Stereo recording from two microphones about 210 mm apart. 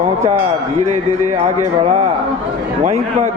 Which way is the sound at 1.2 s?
35° right (ahead or behind).